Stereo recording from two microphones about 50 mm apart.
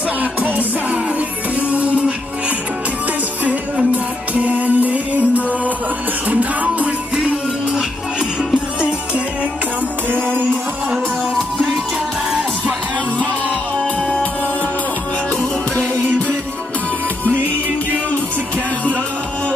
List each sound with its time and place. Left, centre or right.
0.2 s music: right
1.7 s music: right
3.9 s music: right